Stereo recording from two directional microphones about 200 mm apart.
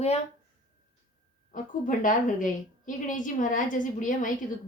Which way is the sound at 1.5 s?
40° left (ahead or behind).